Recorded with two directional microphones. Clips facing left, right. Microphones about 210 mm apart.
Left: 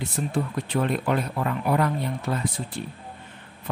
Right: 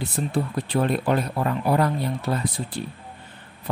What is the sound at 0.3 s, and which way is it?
Speech, 35° right (ahead or behind).